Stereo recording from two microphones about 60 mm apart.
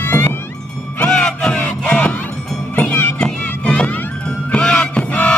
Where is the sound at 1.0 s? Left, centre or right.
Centre.